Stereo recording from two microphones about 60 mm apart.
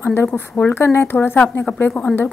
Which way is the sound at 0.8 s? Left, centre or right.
Left.